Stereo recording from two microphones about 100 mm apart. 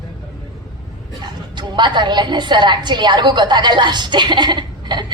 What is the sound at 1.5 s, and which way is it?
A woman's voice, 50° right (ahead or behind).